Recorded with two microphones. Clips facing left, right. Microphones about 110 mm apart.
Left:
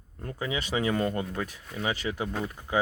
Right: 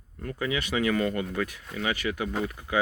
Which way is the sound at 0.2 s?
25° left (ahead or behind).